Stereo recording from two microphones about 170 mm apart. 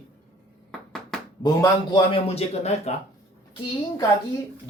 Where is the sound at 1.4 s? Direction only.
25° left (ahead or behind).